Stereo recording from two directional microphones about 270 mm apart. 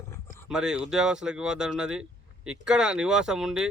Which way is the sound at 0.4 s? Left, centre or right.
Centre.